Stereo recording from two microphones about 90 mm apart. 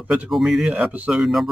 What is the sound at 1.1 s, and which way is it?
Speech, 5° right (ahead or behind).